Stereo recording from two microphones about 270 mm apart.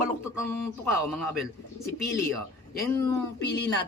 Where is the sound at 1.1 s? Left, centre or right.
Centre.